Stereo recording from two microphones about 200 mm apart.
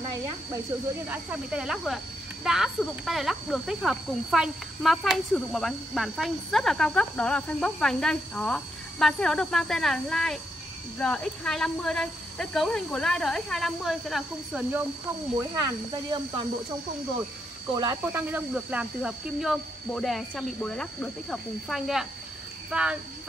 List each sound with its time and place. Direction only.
1.0 s speech: 5° right (ahead or behind)
15.3 s speech: 15° right (ahead or behind)
18.0 s speech: 10° right (ahead or behind)